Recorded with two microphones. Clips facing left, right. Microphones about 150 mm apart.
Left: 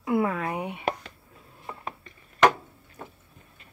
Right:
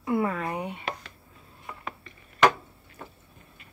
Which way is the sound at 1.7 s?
30° left (ahead or behind).